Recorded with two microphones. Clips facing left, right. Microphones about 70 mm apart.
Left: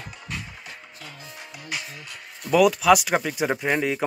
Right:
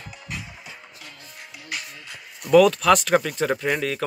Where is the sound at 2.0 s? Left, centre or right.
Centre.